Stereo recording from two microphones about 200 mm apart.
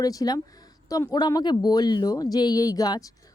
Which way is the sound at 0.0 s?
20° left (ahead or behind).